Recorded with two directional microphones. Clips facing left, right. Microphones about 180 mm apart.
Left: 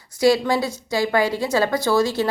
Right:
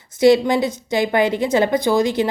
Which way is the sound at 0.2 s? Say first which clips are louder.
Right 4 dB; 20° right (ahead or behind).